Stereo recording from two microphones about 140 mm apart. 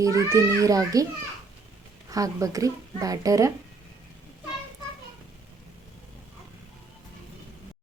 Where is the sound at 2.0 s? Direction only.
25° right (ahead or behind).